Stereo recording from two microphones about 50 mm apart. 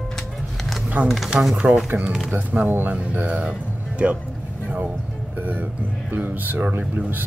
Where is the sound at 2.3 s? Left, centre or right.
Right.